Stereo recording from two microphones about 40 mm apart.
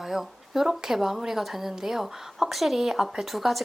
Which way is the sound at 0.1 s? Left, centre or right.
Centre.